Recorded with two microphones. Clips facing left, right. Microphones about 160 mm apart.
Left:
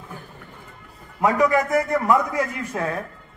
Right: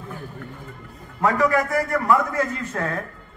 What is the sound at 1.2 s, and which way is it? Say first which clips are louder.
A man's voice: left 1 dB; 15° left (ahead or behind).